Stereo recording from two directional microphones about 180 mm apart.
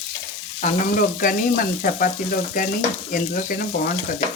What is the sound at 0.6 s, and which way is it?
Frying, 50° left (ahead or behind).